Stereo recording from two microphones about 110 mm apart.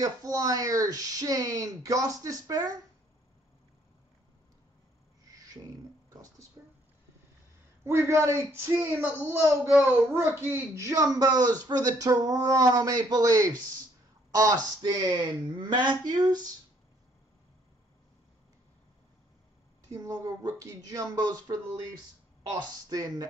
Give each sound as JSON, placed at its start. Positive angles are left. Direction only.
{"t": 0.0, "sound": "speech", "side_deg": -35}
{"t": 5.3, "sound": "a sound", "side_deg": -35}
{"t": 7.8, "sound": "speech", "side_deg": -25}
{"t": 19.9, "sound": "speech", "side_deg": -35}
{"t": 22.6, "sound": "speech", "side_deg": -35}